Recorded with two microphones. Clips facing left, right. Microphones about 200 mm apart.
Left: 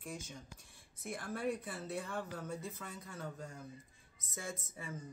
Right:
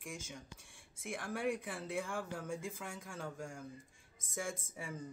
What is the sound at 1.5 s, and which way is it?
Speech, 90° right.